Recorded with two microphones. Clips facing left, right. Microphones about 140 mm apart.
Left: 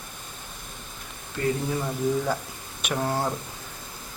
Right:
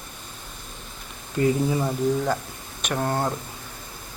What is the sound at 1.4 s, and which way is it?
Speech, 20° right (ahead or behind).